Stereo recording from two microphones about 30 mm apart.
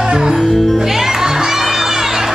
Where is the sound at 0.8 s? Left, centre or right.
Centre.